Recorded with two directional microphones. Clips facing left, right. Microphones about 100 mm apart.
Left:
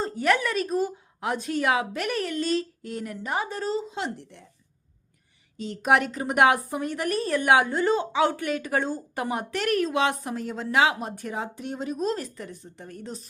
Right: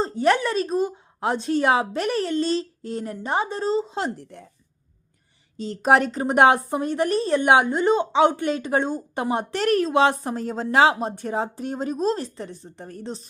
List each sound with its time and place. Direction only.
0.0 s a woman's voice: 30° right (ahead or behind)
3.9 s speech: 40° right (ahead or behind)
5.5 s a woman's voice: 35° right (ahead or behind)